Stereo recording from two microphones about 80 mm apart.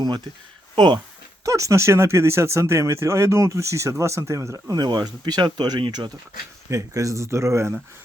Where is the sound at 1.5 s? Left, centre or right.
Right.